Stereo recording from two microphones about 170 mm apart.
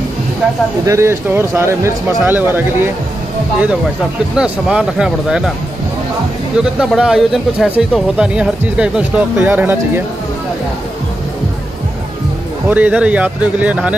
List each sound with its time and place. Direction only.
0.8 s speech: 15° right (ahead or behind)
4.4 s speech: 5° right (ahead or behind)
6.6 s speech: 5° right (ahead or behind)
12.6 s speech: 10° right (ahead or behind)